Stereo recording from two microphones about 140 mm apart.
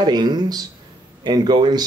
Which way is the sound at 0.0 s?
30° right (ahead or behind).